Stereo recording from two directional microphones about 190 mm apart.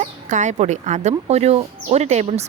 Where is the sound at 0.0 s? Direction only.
40° right (ahead or behind).